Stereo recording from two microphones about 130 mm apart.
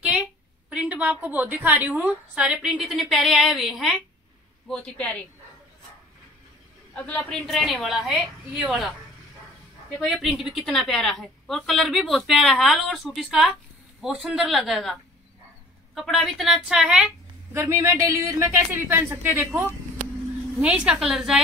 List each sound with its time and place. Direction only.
0.7 s a woman's voice: 10° right (ahead or behind)
4.6 s speech: 10° left (ahead or behind)
7.1 s a woman's voice: 5° left (ahead or behind)
9.9 s a woman's voice: centre (ahead or behind)
17.6 s a woman's voice: 20° right (ahead or behind); by 21.4 s 5° right (ahead or behind)